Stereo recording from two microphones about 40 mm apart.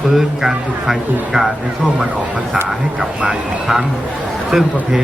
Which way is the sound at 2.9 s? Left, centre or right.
Right.